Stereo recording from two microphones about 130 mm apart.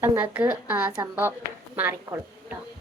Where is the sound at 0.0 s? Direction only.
15° right (ahead or behind).